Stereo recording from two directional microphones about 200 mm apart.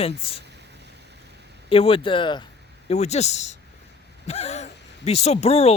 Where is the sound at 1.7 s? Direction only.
25° left (ahead or behind).